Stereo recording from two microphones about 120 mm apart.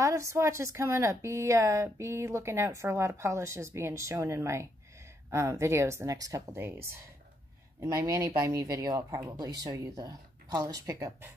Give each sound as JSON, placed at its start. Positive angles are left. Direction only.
{"t": 0.0, "sound": "a woman's voice", "side_deg": -25}